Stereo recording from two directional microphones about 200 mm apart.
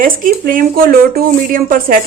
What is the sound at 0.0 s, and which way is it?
Speech, 45° right (ahead or behind).